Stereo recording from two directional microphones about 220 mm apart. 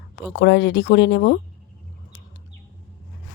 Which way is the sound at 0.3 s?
50° left (ahead or behind).